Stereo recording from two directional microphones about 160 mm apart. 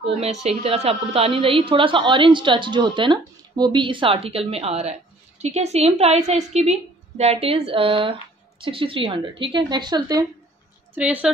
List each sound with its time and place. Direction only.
0.0 s a woman's voice: 40° right (ahead or behind); by 10.2 s 25° right (ahead or behind)
11.0 s speech: 10° right (ahead or behind)